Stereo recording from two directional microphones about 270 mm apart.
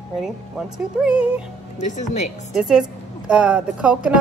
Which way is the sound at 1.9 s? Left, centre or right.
Left.